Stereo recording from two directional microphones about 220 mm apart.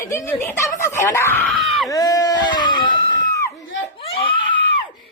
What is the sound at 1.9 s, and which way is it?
Speech, 15° left (ahead or behind).